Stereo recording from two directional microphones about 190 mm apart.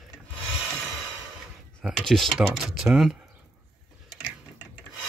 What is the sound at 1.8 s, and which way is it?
Speech, centre (ahead or behind).